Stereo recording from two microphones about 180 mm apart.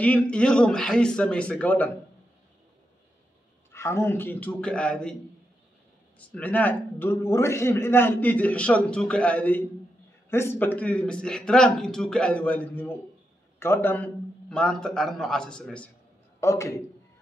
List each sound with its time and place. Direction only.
0.0 s a man's voice: 5° left (ahead or behind)
3.7 s a man's voice: 15° left (ahead or behind)
6.1 s a man's voice: 10° left (ahead or behind)
16.3 s a man's voice: 15° left (ahead or behind)